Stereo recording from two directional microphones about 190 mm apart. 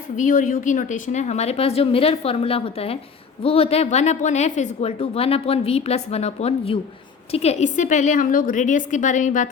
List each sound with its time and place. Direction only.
0.2 s a woman's voice: 45° left (ahead or behind)